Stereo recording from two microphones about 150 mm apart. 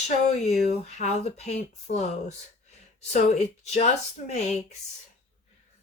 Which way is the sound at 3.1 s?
50° left (ahead or behind).